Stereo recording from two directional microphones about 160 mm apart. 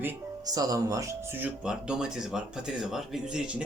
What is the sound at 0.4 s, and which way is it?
Speech, 25° right (ahead or behind).